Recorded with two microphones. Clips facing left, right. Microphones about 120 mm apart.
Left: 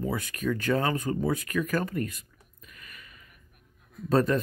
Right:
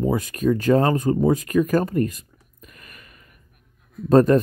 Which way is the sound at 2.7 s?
50° right (ahead or behind).